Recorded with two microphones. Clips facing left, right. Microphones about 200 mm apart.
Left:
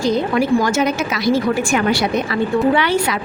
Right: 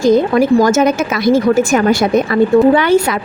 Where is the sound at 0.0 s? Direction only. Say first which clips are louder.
Right 6 dB; 45° right (ahead or behind).